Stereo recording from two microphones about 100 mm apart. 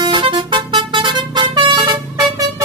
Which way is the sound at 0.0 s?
55° right (ahead or behind).